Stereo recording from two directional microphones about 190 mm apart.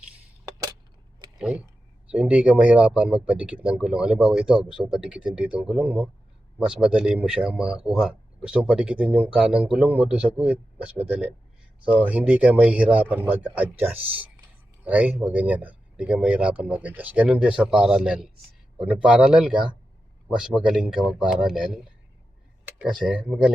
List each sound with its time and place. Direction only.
1.4 s speech: 5° right (ahead or behind)